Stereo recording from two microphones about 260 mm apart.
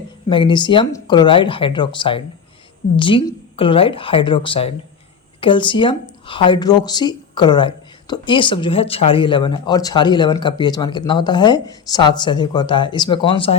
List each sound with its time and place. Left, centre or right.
0.3 s speech: centre